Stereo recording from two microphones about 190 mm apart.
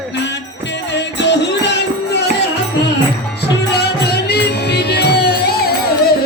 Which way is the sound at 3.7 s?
60° left (ahead or behind).